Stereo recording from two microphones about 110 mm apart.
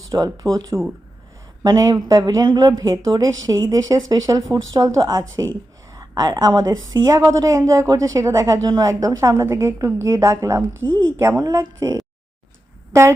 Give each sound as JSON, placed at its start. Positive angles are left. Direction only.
{"t": 0.1, "sound": "a woman's voice", "side_deg": -35}
{"t": 5.9, "sound": "a sound", "side_deg": -35}
{"t": 6.4, "sound": "a woman's voice", "side_deg": -35}